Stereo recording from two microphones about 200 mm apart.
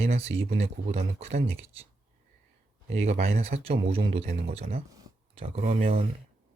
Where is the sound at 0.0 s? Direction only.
30° right (ahead or behind).